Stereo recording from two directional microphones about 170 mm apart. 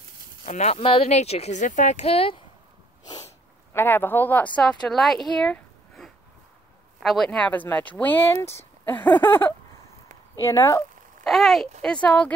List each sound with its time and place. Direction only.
0.5 s speech: 40° left (ahead or behind)
3.7 s speech: 15° left (ahead or behind)
11.2 s speech: centre (ahead or behind)